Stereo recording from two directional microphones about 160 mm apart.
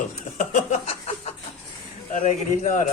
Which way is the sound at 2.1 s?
50° left (ahead or behind).